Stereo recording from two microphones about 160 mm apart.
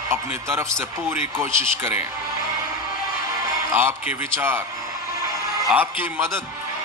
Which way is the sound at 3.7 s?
15° right (ahead or behind).